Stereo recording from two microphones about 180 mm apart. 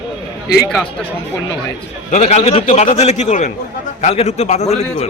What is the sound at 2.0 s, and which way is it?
A man's voice, 40° left (ahead or behind).